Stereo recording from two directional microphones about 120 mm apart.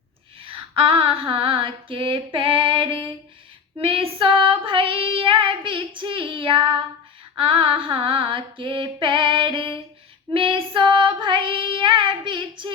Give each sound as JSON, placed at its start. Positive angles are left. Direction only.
{"t": 0.4, "sound": "female singing", "side_deg": -50}